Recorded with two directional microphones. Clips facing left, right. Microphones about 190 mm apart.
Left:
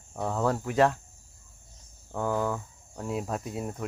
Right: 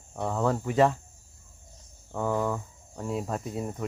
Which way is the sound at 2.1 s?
Centre (ahead or behind).